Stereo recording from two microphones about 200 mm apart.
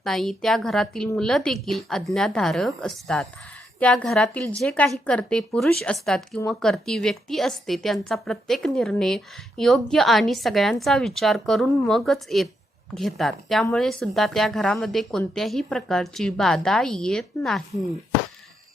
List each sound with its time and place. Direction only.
0.0 s speech: centre (ahead or behind)